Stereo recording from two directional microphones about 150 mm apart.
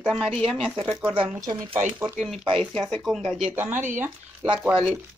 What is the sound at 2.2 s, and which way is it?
Speech, centre (ahead or behind).